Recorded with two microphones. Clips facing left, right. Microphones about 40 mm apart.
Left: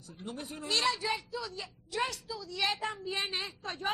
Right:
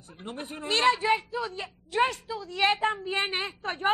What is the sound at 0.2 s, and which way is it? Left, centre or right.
A man's voice, right.